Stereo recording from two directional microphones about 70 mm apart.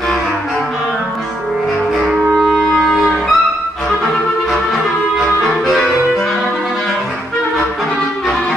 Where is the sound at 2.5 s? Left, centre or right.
Centre.